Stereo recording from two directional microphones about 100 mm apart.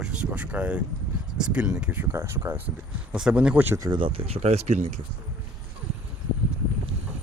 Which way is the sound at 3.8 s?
40° right (ahead or behind).